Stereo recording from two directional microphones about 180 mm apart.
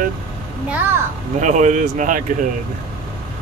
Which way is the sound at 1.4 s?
40° right (ahead or behind).